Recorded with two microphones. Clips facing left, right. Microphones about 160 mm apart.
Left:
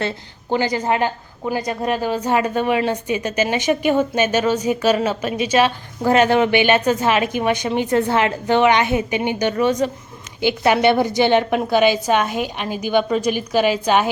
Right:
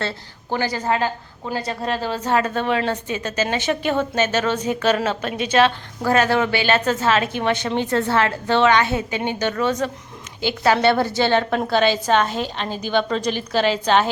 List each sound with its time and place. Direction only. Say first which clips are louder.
0.5 s a woman's voice: left 3 dB; 15° left (ahead or behind)